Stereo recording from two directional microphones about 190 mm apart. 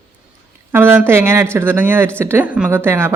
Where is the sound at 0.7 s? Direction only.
10° right (ahead or behind).